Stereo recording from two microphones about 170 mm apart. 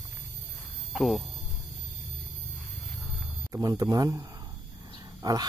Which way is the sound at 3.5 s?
20° right (ahead or behind).